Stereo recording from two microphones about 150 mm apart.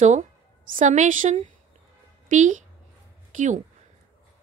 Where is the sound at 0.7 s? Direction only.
55° right (ahead or behind).